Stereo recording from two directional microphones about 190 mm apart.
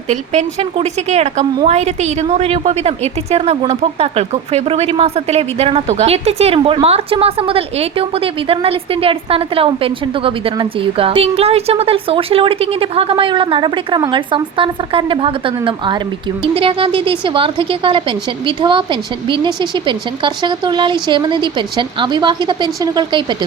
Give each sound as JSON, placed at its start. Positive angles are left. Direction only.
{"t": 0.1, "sound": "a woman's voice", "side_deg": -35}